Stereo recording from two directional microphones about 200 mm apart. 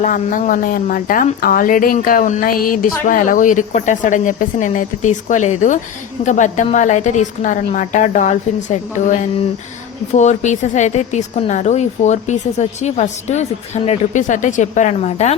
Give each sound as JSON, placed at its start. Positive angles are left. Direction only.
{"t": 0.0, "sound": "a woman's voice", "side_deg": 40}